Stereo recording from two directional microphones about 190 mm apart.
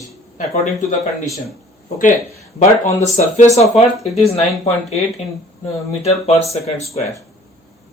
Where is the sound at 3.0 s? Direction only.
35° left (ahead or behind).